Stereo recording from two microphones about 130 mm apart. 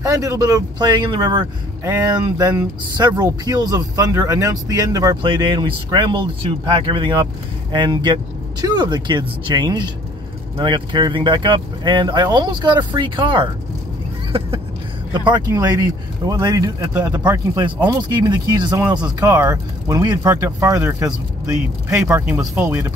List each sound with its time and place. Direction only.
0.0 s speech: 25° right (ahead or behind)
5.1 s speech: 40° right (ahead or behind)
15.1 s speech: 35° right (ahead or behind)
19.2 s speech: 25° right (ahead or behind)